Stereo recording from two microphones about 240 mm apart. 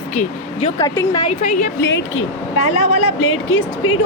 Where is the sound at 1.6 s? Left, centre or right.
Left.